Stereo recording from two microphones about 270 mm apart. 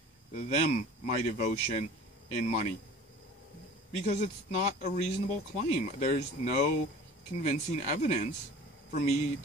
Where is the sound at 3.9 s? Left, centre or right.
Left.